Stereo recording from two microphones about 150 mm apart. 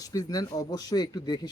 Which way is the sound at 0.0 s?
25° left (ahead or behind).